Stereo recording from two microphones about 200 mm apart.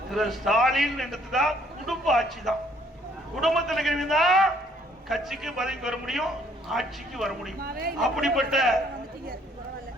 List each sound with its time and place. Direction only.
0.1 s a man's voice: centre (ahead or behind)
7.6 s a man's voice: 50° right (ahead or behind)
7.9 s a man's voice: centre (ahead or behind)